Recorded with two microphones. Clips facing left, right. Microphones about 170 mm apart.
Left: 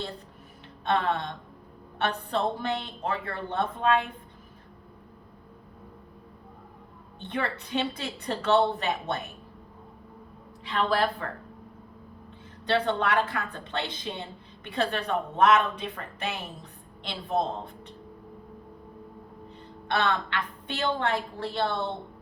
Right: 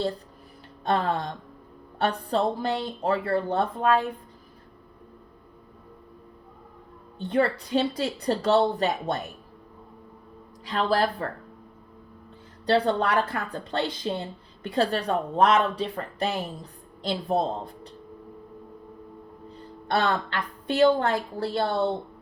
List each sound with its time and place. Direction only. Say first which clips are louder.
0.9 s a woman's voice: right 2 dB; 35° right (ahead or behind)
7.2 s a woman's voice: right 8 dB; 35° right (ahead or behind)
10.7 s a woman's voice: right 2 dB; 35° right (ahead or behind)
12.6 s a woman's voice: right 3 dB; 35° right (ahead or behind)
19.9 s a woman's voice: right 2 dB; 40° right (ahead or behind)